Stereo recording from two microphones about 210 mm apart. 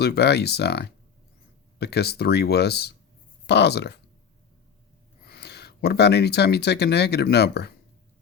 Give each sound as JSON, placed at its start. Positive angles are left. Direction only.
{"t": 0.0, "sound": "speech", "side_deg": 50}
{"t": 5.2, "sound": "speech", "side_deg": 50}